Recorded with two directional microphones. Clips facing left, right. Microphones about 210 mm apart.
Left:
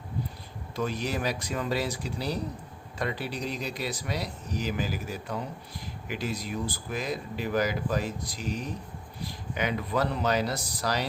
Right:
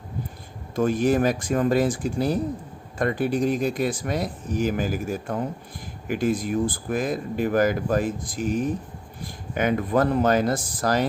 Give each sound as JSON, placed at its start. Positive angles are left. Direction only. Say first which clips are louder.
{"t": 0.8, "sound": "speech", "louder": "right 10 dB", "side_deg": -50}